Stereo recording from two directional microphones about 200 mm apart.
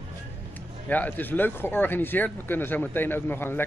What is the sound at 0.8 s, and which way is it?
Speech, 10° left (ahead or behind).